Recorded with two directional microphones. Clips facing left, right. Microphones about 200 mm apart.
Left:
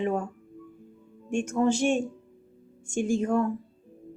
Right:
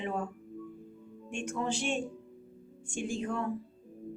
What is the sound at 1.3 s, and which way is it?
Speech, 45° left (ahead or behind).